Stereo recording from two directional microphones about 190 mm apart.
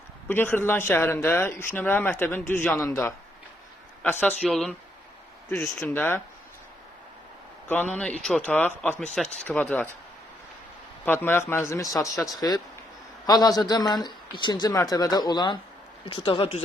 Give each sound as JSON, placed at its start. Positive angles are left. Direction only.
{"t": 0.3, "sound": "a man's voice", "side_deg": 10}
{"t": 7.7, "sound": "a man's voice", "side_deg": 5}
{"t": 11.0, "sound": "a man's voice", "side_deg": 10}
{"t": 12.1, "sound": "speech", "side_deg": 0}
{"t": 12.4, "sound": "a man's voice", "side_deg": 20}